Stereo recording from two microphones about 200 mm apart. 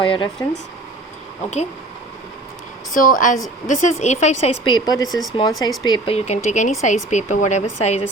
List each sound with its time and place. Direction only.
0.0 s speech: 25° left (ahead or behind)
2.9 s speech: 40° left (ahead or behind); by 5.0 s 20° left (ahead or behind)
5.0 s speech: centre (ahead or behind)
5.4 s speech: 20° left (ahead or behind); by 8.0 s 35° left (ahead or behind)